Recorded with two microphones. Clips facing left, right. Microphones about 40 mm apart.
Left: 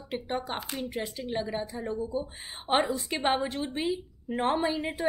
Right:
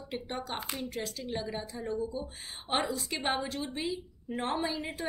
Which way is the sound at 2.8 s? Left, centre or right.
Left.